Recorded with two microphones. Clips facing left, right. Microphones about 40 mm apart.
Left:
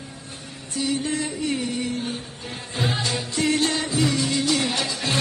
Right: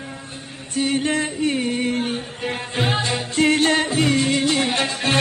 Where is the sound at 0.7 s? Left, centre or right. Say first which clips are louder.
Right 4 dB; right.